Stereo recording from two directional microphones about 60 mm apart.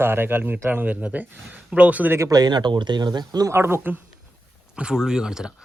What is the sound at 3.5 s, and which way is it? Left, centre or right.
Speech, right.